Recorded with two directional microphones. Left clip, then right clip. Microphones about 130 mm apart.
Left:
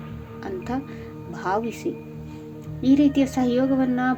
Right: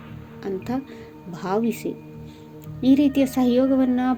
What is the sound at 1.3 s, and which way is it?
Speech, 50° right (ahead or behind).